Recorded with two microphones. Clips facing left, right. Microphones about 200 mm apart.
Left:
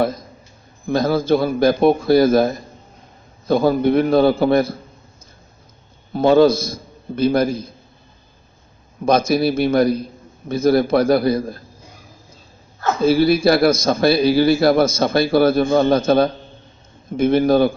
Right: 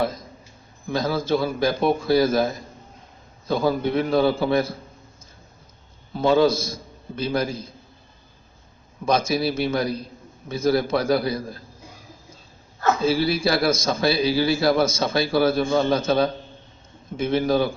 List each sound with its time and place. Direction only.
0.9 s a man's voice: 55° left (ahead or behind)
6.1 s a man's voice: 55° left (ahead or behind)
9.0 s a man's voice: 55° left (ahead or behind)
13.0 s a man's voice: 55° left (ahead or behind)